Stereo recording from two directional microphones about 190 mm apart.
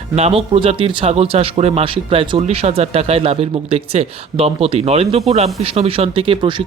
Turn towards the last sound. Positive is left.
turn(degrees=-30)  # may be behind; listen again after turning